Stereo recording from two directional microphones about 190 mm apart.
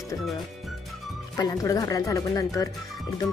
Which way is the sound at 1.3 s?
20° left (ahead or behind).